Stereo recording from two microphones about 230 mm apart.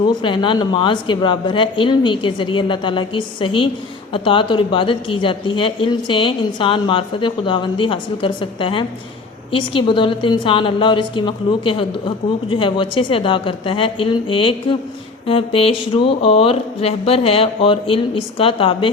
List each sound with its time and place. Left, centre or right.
0.1 s a woman's voice: left